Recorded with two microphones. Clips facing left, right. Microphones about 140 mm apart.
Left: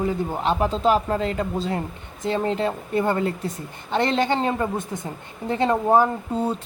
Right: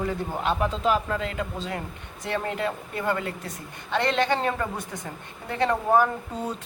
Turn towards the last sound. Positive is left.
turn(degrees=25)  # may be behind; listen again after turning